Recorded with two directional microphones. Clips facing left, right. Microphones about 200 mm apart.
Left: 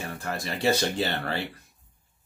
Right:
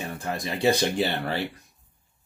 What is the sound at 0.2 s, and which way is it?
Speech, 15° right (ahead or behind).